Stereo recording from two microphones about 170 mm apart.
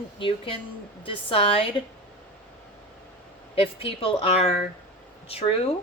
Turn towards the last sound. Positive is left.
turn(degrees=35)  # may be behind; listen again after turning